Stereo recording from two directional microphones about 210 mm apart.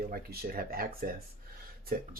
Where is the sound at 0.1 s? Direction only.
45° right (ahead or behind).